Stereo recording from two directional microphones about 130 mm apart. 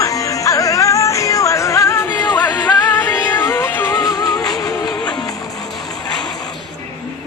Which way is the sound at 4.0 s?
30° left (ahead or behind).